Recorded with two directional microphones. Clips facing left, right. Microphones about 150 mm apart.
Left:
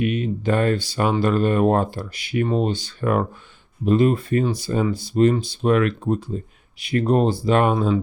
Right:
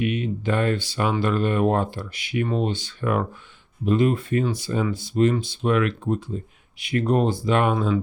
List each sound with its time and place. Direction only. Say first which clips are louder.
0.0 s speech: left 2 dB; 40° left (ahead or behind)